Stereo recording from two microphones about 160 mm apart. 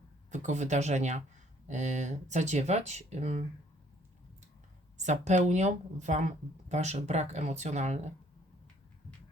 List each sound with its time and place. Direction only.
0.3 s speech: 50° right (ahead or behind)
4.9 s speech: 50° right (ahead or behind)